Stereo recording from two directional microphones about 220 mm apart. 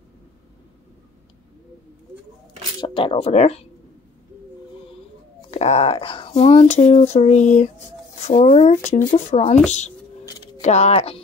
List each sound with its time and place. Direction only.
2.8 s speech: 25° left (ahead or behind)
5.5 s speech: 30° left (ahead or behind)
10.2 s scissors: 20° left (ahead or behind)
10.6 s speech: 30° left (ahead or behind)